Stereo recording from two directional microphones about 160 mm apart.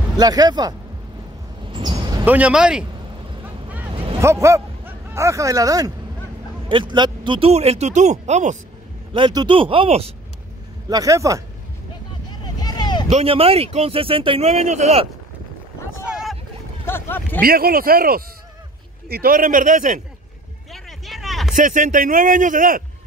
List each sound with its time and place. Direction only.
0.2 s speech: 25° right (ahead or behind)
1.7 s a sound: 25° right (ahead or behind)
2.2 s speech: 10° right (ahead or behind)
4.2 s speech: 15° right (ahead or behind); by 8.5 s 45° right (ahead or behind)
9.1 s speech: 30° right (ahead or behind)
10.9 s speech: 20° right (ahead or behind)
12.3 s vehicle: 25° left (ahead or behind)
13.1 s speech: 35° right (ahead or behind)
16.1 s boat: 5° right (ahead or behind)
16.8 s speech: 15° left (ahead or behind)
17.4 s speech: 70° right (ahead or behind); by 20.0 s 50° right (ahead or behind)
20.7 s a sound: centre (ahead or behind)
21.5 s speech: 50° right (ahead or behind)